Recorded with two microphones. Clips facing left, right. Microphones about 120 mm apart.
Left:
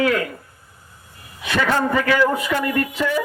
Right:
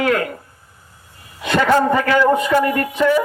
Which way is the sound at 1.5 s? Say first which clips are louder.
Right 5 dB; 40° right (ahead or behind).